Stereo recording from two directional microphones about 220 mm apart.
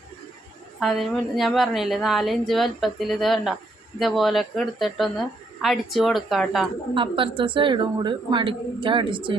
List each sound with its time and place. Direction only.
0.8 s a woman's voice: centre (ahead or behind)
6.9 s a woman's voice: 25° right (ahead or behind)